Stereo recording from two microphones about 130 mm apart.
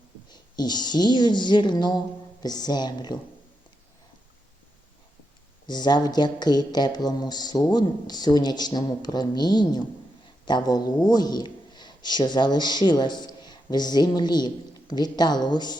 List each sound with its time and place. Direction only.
0.3 s speech: 30° left (ahead or behind)
5.6 s a man's voice: 35° left (ahead or behind)